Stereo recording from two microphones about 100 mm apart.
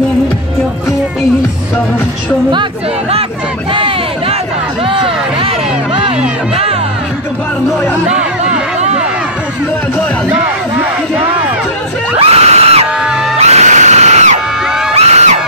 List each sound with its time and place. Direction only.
3.7 s crowd: 60° right (ahead or behind)
4.8 s music: 65° right (ahead or behind)
12.2 s screaming: 90° right
13.4 s a sound: 90° right
15.0 s crowd: 90° right